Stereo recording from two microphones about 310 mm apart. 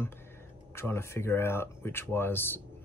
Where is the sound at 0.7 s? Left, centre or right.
Centre.